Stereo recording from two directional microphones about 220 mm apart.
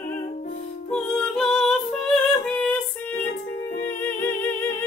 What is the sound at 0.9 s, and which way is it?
Music, 5° left (ahead or behind).